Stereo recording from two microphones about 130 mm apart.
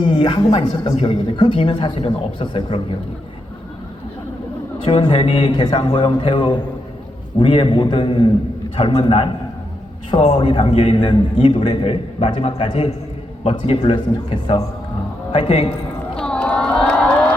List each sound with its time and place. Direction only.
0.0 s a man's voice: 35° left (ahead or behind)
4.9 s a man's voice: 40° left (ahead or behind)
8.7 s a man's voice: 50° left (ahead or behind)
10.2 s speech: 60° left (ahead or behind)
10.4 s a man's voice: 40° left (ahead or behind)
15.3 s a man's voice: 40° left (ahead or behind)
16.1 s crowd: 5° left (ahead or behind)